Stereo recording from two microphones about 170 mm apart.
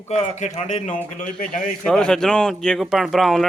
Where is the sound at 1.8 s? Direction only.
5° left (ahead or behind).